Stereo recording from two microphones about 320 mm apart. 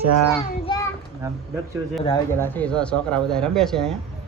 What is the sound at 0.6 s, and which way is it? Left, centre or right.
Children playing, centre.